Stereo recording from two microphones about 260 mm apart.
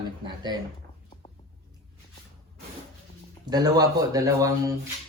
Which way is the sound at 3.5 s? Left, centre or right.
Centre.